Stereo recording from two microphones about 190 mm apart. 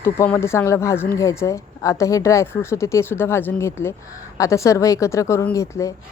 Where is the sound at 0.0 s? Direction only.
15° left (ahead or behind).